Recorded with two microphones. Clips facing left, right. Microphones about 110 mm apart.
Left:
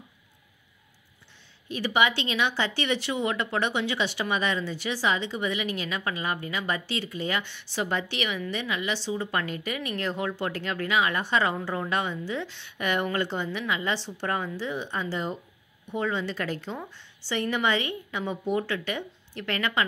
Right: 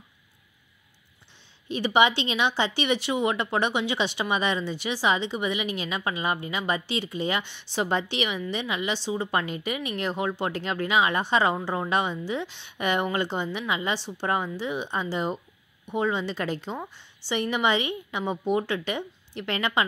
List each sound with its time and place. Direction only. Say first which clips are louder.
1.7 s speech: right 3 dB; 25° right (ahead or behind)